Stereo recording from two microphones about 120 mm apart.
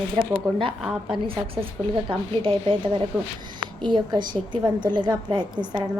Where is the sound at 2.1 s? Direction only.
45° right (ahead or behind).